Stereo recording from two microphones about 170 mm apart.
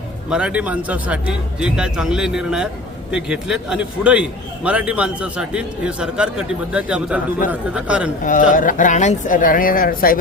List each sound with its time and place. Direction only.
0.3 s a man's voice: 5° right (ahead or behind)
8.2 s speech: 50° left (ahead or behind)